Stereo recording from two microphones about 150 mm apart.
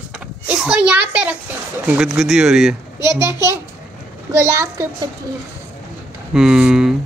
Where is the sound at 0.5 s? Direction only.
10° right (ahead or behind).